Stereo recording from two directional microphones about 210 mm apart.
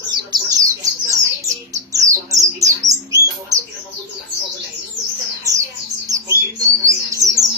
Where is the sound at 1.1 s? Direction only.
15° right (ahead or behind).